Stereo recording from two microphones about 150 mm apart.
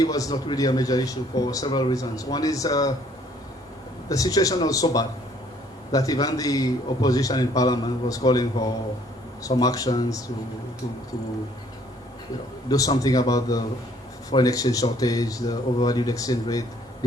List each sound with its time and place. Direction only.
0.0 s speech: 25° left (ahead or behind)
4.1 s speech: 25° left (ahead or behind)
12.6 s speech: 25° left (ahead or behind)